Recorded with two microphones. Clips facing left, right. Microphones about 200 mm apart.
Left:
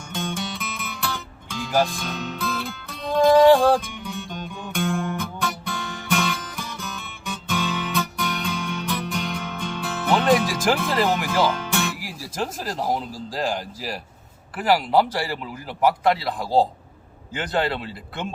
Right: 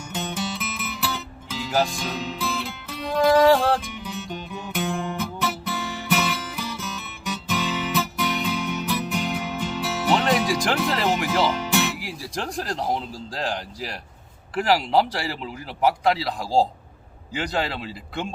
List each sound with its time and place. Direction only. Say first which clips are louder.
0.1 s music: even; 5° right (ahead or behind)
13.3 s speech: left 3 dB; 5° left (ahead or behind)